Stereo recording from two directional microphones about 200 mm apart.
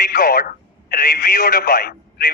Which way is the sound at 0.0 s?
45° left (ahead or behind).